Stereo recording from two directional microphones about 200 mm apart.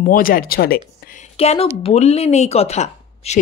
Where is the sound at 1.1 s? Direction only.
30° left (ahead or behind).